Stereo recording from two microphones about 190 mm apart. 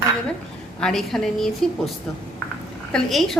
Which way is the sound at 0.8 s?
5° left (ahead or behind).